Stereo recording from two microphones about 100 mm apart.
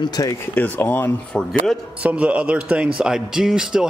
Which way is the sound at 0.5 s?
20° left (ahead or behind).